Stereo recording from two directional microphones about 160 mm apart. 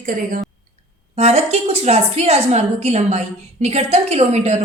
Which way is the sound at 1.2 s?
40° right (ahead or behind).